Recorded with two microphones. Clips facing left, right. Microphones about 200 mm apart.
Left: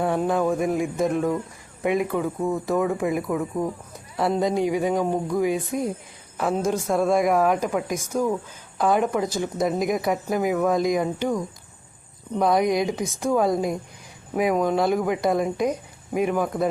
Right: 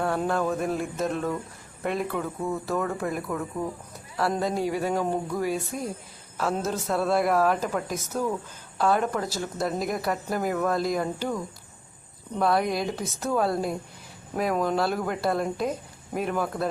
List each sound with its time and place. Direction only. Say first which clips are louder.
0.0 s speech: left 4 dB; 15° left (ahead or behind)
6.7 s speech: left 6 dB; 10° left (ahead or behind)